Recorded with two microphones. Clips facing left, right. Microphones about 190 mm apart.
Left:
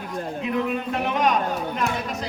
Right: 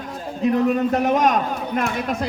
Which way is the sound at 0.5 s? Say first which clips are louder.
Right 6 dB; 45° right (ahead or behind).